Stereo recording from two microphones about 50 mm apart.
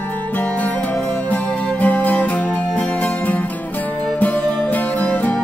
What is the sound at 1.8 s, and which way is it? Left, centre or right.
Music, left.